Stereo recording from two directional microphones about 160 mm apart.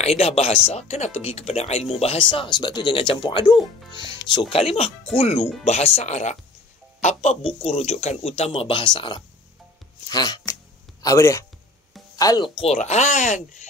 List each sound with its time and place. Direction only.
0.0 s speech: 40° left (ahead or behind)
10.0 s music: 25° left (ahead or behind)
12.2 s speech: 25° left (ahead or behind)
12.5 s speech: 40° left (ahead or behind)